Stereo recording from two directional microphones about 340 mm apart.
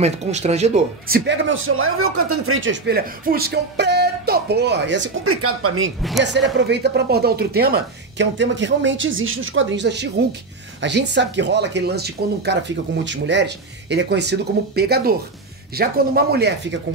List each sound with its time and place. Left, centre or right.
0.0 s a man's voice: centre